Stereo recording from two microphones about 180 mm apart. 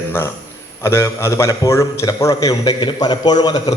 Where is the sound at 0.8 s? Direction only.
15° left (ahead or behind).